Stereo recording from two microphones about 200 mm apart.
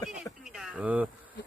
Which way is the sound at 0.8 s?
5° right (ahead or behind).